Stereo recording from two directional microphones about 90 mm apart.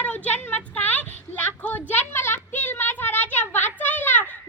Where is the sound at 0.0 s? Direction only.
15° left (ahead or behind).